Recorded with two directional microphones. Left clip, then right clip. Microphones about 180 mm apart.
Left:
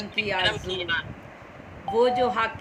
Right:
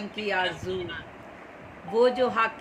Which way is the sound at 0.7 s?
55° left (ahead or behind).